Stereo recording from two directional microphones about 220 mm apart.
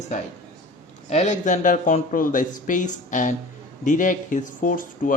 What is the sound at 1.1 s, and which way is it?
Speech, 30° left (ahead or behind).